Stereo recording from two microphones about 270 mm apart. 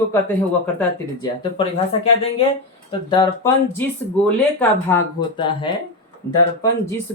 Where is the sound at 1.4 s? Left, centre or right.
Centre.